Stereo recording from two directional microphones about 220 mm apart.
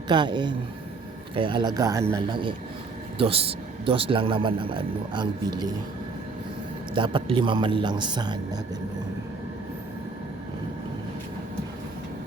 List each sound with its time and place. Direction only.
0.1 s a man's voice: 20° right (ahead or behind)
6.9 s a man's voice: 25° right (ahead or behind)